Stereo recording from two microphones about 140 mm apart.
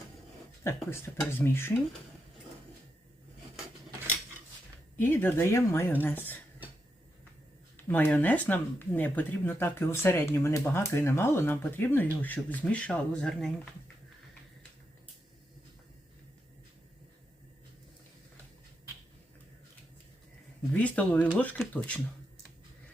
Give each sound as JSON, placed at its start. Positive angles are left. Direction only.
{"t": 0.6, "sound": "speech", "side_deg": 20}
{"t": 4.9, "sound": "speech", "side_deg": 15}
{"t": 7.9, "sound": "speech", "side_deg": 10}
{"t": 20.7, "sound": "speech", "side_deg": 10}